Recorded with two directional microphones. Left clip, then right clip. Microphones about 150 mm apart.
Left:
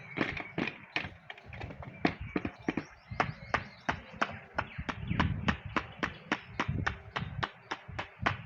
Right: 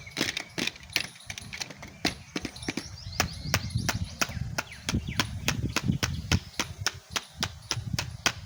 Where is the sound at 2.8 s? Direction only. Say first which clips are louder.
Right 3 dB; 35° right (ahead or behind).